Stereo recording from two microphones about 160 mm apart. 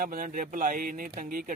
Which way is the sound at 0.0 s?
55° right (ahead or behind).